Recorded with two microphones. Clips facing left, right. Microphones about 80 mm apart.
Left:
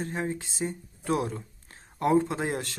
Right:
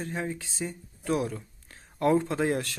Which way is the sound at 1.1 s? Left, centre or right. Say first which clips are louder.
Even; left.